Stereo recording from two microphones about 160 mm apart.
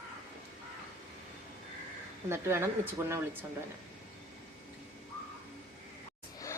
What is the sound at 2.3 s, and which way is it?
Speech, 15° right (ahead or behind).